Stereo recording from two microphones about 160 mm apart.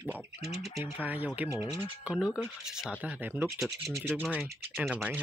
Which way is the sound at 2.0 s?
5° right (ahead or behind).